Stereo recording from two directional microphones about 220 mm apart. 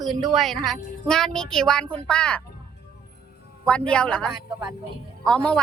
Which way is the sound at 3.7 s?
5° left (ahead or behind).